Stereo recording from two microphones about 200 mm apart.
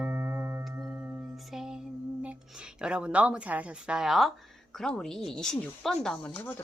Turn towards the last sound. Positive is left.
turn(degrees=10)  # may be behind; listen again after turning